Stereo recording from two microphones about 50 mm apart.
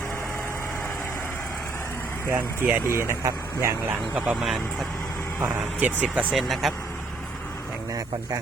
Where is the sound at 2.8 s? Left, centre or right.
Right.